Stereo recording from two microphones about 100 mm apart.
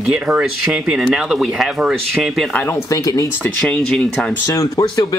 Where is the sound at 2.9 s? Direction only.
35° left (ahead or behind).